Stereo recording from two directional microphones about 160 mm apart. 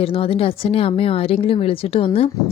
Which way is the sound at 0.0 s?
35° left (ahead or behind).